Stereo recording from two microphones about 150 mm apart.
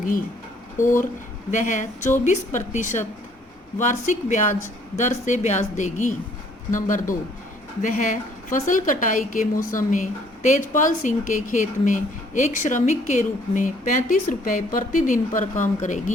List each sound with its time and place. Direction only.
1.5 s a woman's voice: 55° left (ahead or behind)